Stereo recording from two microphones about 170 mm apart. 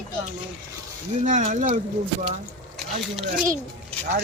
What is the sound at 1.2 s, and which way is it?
Speech, 45° right (ahead or behind).